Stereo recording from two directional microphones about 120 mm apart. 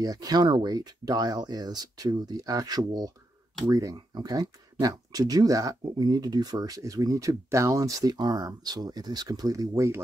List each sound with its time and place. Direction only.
0.0 s speech: 30° right (ahead or behind)